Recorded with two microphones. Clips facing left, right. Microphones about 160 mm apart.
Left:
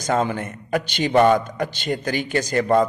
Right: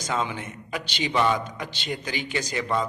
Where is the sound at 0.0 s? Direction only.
50° left (ahead or behind).